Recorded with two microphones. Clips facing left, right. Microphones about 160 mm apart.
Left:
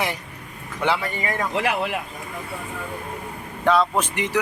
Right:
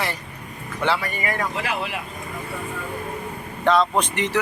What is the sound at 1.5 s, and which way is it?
Speech, 60° left (ahead or behind).